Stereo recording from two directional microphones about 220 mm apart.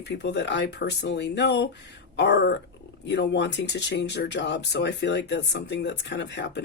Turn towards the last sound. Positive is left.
turn(degrees=50)  # may be behind; listen again after turning